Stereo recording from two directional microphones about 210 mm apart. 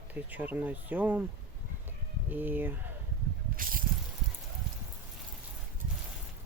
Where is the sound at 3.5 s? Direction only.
40° right (ahead or behind).